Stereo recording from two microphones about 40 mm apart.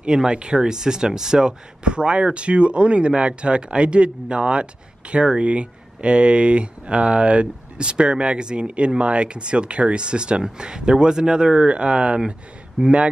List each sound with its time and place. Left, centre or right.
0.0 s speech: centre